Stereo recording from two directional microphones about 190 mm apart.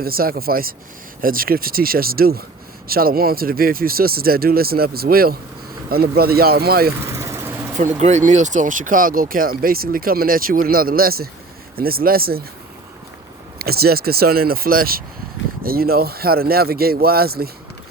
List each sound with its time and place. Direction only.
0.0 s speech: 50° right (ahead or behind)
7.1 s vehicle: 15° right (ahead or behind)
7.8 s speech: 35° right (ahead or behind)
13.6 s speech: 55° right (ahead or behind)